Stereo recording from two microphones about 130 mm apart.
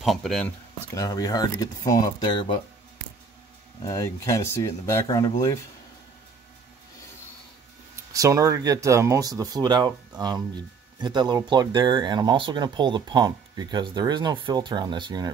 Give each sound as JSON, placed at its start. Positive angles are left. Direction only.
{"t": 0.0, "sound": "speech", "side_deg": 0}
{"t": 0.9, "sound": "speech", "side_deg": 30}
{"t": 3.8, "sound": "speech", "side_deg": 25}
{"t": 7.9, "sound": "speech", "side_deg": -25}